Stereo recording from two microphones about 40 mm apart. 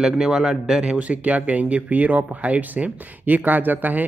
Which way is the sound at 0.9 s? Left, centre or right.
Right.